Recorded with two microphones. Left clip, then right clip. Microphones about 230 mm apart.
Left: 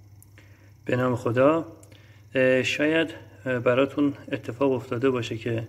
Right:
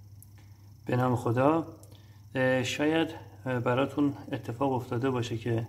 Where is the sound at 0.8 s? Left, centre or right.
Centre.